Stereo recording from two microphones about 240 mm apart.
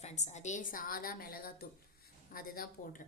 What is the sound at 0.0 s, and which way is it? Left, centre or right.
Speech, left.